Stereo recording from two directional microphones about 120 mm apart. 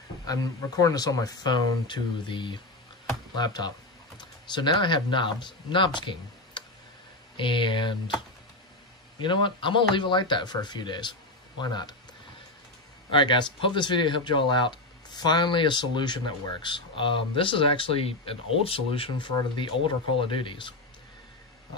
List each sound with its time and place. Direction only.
0.3 s speech: 30° left (ahead or behind)
9.2 s speech: 45° left (ahead or behind)
13.1 s speech: 40° left (ahead or behind)